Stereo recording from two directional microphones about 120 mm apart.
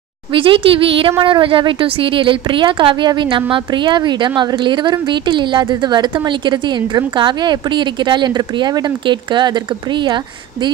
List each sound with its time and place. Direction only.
0.3 s a woman's voice: 45° right (ahead or behind)